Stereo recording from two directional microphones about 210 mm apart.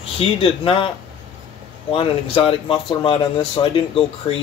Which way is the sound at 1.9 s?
25° left (ahead or behind).